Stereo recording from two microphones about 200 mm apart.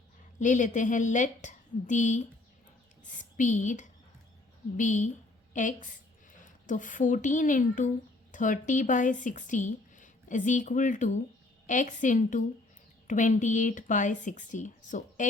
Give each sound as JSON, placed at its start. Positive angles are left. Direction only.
{"t": 0.3, "sound": "a woman's voice", "side_deg": 40}